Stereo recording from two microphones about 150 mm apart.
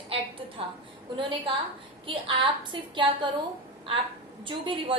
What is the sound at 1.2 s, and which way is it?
A woman's voice, 35° right (ahead or behind).